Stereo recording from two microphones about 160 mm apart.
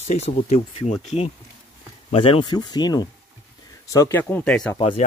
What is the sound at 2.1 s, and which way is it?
Speech, 35° left (ahead or behind).